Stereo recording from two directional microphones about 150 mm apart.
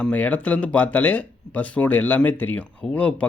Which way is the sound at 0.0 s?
10° left (ahead or behind).